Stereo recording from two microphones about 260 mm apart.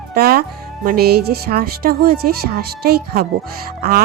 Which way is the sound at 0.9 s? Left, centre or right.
Right.